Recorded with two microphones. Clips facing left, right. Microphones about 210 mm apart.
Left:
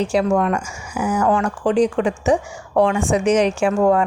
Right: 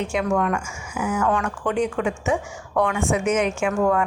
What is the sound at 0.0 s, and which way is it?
A woman's voice, 35° left (ahead or behind).